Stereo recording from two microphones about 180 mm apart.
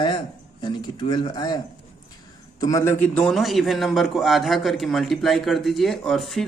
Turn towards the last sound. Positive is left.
turn(degrees=0)  # may be behind; listen again after turning